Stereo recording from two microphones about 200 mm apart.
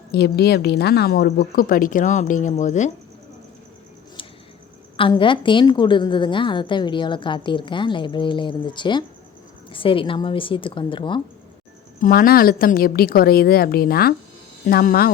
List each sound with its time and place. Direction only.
0.1 s a woman's voice: 55° left (ahead or behind); by 2.9 s 35° left (ahead or behind)
4.9 s a woman's voice: 25° left (ahead or behind)
11.9 s a woman's voice: 45° left (ahead or behind)